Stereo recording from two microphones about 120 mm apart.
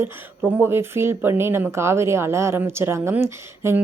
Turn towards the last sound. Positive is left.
turn(degrees=-20)  # may be behind; listen again after turning